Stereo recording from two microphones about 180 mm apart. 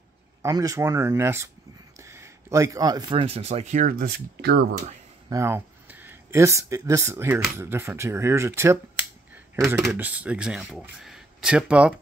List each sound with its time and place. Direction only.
0.4 s speech: 20° right (ahead or behind); by 4.6 s 65° right (ahead or behind)
5.3 s speech: 15° right (ahead or behind)